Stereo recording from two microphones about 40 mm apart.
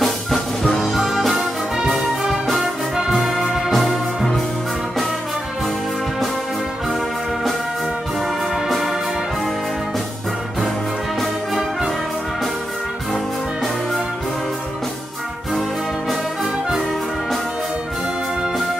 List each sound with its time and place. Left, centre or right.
0.7 s music: centre
2.6 s music: centre
3.2 s music: centre
8.5 s music: centre